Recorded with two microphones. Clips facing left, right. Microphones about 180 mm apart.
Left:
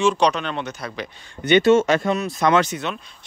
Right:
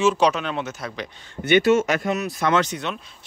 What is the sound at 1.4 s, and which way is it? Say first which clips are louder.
Speech: left 2 dB; 25° left (ahead or behind).